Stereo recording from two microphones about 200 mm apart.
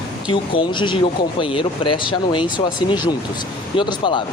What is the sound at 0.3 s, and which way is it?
Speech, 25° left (ahead or behind).